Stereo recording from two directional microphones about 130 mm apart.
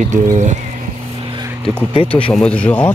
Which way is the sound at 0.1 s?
70° right (ahead or behind).